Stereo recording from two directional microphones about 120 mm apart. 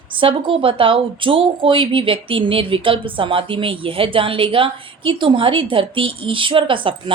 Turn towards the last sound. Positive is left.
turn(degrees=-45)  # may be behind; listen again after turning